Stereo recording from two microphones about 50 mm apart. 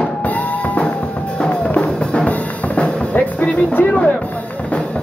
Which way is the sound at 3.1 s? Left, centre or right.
Left.